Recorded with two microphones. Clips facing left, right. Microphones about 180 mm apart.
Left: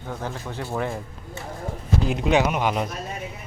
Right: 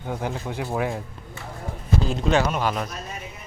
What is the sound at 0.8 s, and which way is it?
Speech, centre (ahead or behind).